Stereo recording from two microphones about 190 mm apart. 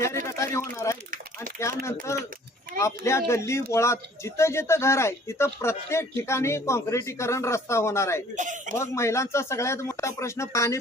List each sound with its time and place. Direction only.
0.3 s a man's voice: 15° left (ahead or behind)
1.5 s a sound: 15° left (ahead or behind)
2.8 s speech: 15° left (ahead or behind)